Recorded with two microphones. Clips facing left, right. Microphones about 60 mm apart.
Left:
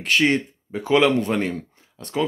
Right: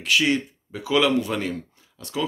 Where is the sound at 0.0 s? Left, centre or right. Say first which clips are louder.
Left 2 dB; left.